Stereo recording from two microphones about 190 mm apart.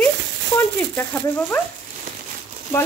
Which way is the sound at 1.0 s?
10° left (ahead or behind).